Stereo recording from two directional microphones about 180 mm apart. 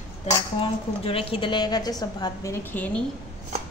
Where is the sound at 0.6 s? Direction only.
30° left (ahead or behind).